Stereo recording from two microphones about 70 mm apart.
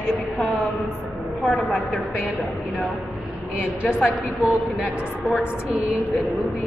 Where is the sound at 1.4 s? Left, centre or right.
Centre.